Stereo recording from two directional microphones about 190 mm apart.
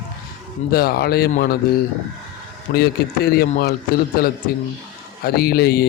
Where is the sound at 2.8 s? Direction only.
55° left (ahead or behind).